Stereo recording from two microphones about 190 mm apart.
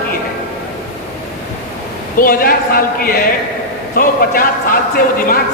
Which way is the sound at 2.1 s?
50° left (ahead or behind).